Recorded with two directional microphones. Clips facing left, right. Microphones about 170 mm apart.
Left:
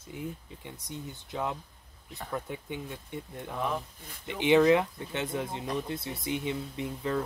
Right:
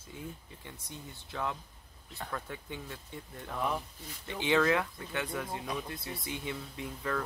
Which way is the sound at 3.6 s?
5° right (ahead or behind).